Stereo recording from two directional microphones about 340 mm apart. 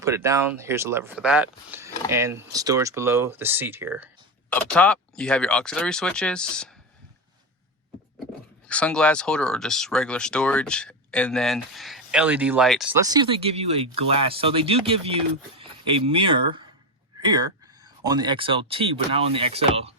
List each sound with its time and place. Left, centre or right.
0.0 s speech: centre
4.4 s speech: centre
8.6 s speech: centre